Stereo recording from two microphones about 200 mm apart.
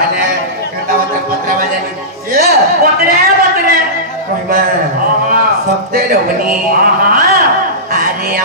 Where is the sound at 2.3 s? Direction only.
50° right (ahead or behind).